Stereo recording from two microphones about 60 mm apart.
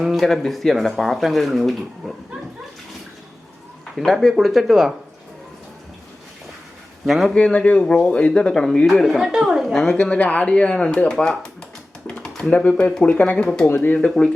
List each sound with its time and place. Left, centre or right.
0.0 s speech: centre
3.9 s speech: centre
7.0 s speech: centre
7.3 s speech: centre
9.0 s speech: centre
10.2 s speech: left
12.0 s typing: left
12.5 s speech: centre
13.1 s speech: left
13.3 s speech: centre
13.8 s speech: left